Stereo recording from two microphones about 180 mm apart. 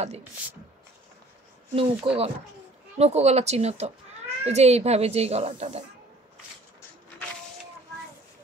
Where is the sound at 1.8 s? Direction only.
30° right (ahead or behind).